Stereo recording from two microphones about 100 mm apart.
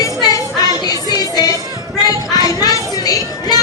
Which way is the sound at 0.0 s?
40° left (ahead or behind).